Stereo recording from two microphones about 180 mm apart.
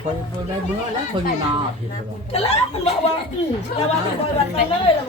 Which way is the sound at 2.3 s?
35° left (ahead or behind).